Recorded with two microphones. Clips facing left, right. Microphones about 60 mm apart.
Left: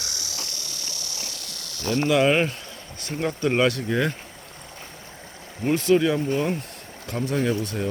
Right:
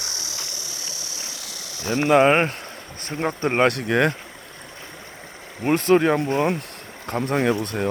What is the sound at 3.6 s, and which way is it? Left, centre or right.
Speech, right.